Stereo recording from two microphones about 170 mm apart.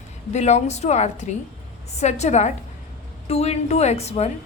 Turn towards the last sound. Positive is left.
turn(degrees=40)  # may be behind; listen again after turning